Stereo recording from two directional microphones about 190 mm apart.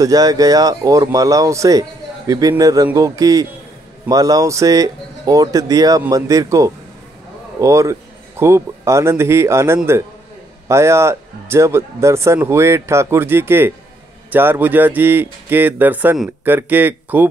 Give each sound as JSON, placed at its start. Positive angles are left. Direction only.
{"t": 0.0, "sound": "speech", "side_deg": -20}